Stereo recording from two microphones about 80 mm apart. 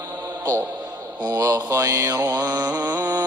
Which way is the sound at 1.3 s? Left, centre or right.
Right.